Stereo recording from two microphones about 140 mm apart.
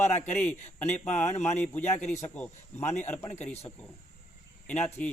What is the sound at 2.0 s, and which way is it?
Speech, 55° left (ahead or behind).